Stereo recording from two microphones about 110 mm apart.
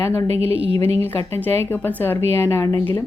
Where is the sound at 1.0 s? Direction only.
20° left (ahead or behind).